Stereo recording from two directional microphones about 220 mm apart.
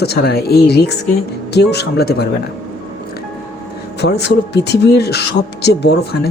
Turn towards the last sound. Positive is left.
turn(degrees=50)  # may be behind; listen again after turning